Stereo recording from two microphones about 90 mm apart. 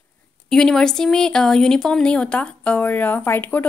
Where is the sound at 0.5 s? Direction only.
5° left (ahead or behind).